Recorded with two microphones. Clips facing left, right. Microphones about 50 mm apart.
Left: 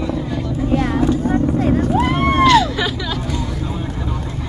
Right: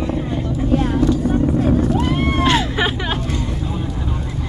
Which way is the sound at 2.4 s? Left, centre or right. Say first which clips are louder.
Left 5 dB; right.